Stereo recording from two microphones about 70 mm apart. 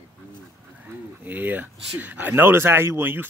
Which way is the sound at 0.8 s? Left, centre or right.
Right.